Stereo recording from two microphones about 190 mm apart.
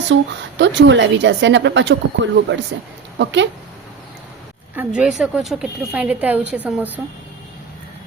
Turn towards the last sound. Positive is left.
turn(degrees=-10)  # may be behind; listen again after turning